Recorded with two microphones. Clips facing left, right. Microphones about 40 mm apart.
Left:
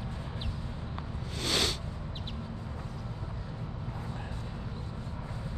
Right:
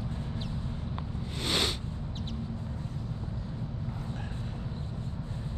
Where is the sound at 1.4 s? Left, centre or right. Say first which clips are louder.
Even; right.